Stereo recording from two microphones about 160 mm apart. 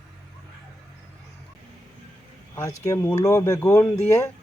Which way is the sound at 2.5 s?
20° left (ahead or behind).